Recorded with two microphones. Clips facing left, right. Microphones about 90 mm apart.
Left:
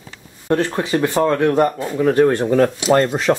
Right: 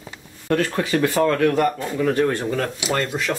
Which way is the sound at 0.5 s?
25° left (ahead or behind).